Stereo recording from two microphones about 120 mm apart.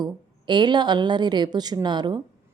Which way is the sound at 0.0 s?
40° right (ahead or behind).